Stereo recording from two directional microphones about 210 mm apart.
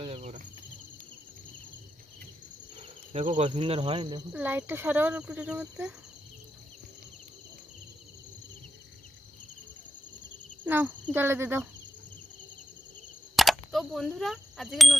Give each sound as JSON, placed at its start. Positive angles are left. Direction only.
{"t": 0.0, "sound": "insect", "side_deg": -30}
{"t": 3.1, "sound": "cricket", "side_deg": -25}
{"t": 4.3, "sound": "speech", "side_deg": -10}
{"t": 10.6, "sound": "insect", "side_deg": -10}
{"t": 11.1, "sound": "speech", "side_deg": -10}
{"t": 13.3, "sound": "speech", "side_deg": 0}